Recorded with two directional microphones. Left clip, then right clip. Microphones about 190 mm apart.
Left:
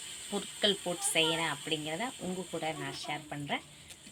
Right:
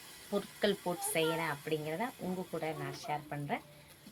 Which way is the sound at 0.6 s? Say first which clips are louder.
Left 4 dB; 10° right (ahead or behind).